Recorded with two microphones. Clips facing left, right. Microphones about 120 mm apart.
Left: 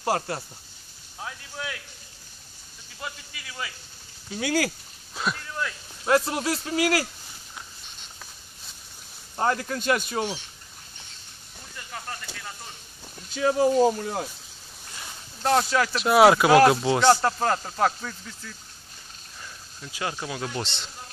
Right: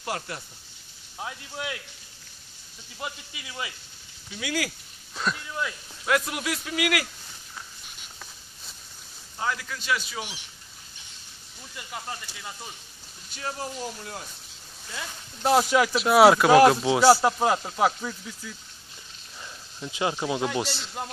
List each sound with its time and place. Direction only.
0.0 s a man's voice: 35° left (ahead or behind)
1.2 s speech: 20° right (ahead or behind)
3.0 s speech: 20° right (ahead or behind)
4.3 s a man's voice: 35° left (ahead or behind)
5.1 s a sound: 5° left (ahead or behind)
5.4 s a sound: 10° right (ahead or behind)
6.0 s a man's voice: 30° left (ahead or behind)
9.4 s speech: 45° left (ahead or behind)
11.7 s speech: 10° right (ahead or behind)
13.4 s speech: 80° left
15.7 s speech: 15° right (ahead or behind)
16.0 s speech: centre (ahead or behind)
19.8 s speech: 20° right (ahead or behind)
20.5 s speech: 5° right (ahead or behind)